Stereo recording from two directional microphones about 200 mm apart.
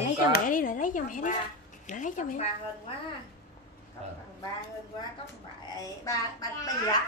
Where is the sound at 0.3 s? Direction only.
45° left (ahead or behind).